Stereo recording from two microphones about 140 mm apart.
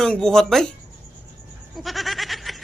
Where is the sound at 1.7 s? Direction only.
Centre (ahead or behind).